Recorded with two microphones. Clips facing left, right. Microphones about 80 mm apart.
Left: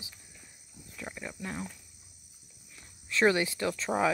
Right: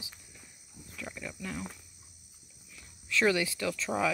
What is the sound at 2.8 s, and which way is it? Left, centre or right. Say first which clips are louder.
Speech: left 2 dB; left.